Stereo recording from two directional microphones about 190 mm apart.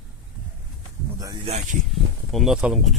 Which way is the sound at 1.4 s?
35° right (ahead or behind).